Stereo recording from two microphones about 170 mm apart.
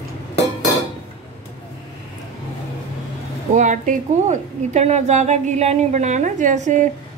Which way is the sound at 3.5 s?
45° right (ahead or behind).